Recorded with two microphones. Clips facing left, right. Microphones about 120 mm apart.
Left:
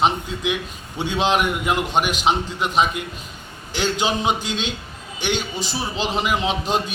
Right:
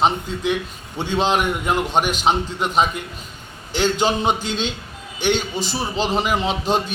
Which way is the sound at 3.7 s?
45° right (ahead or behind).